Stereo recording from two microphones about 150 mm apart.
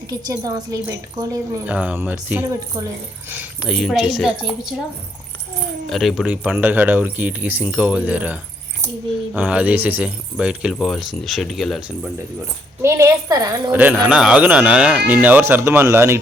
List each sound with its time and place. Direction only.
0.1 s a woman's voice: 25° right (ahead or behind)
1.6 s speech: 10° right (ahead or behind)
3.7 s speech: centre (ahead or behind)
5.9 s speech: centre (ahead or behind)
12.8 s a woman's voice: 20° right (ahead or behind)
13.7 s speech: 10° right (ahead or behind)